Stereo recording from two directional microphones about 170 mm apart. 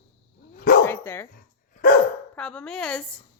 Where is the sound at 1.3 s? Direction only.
55° left (ahead or behind).